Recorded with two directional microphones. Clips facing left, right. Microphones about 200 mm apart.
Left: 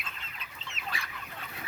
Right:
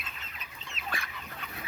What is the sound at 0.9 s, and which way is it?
Chicken, 50° right (ahead or behind).